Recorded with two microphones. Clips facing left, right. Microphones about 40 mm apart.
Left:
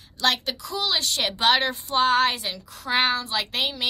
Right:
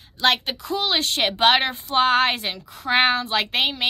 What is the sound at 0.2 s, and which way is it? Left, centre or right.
A woman's voice, right.